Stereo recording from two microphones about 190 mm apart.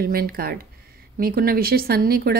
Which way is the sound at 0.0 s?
50° right (ahead or behind).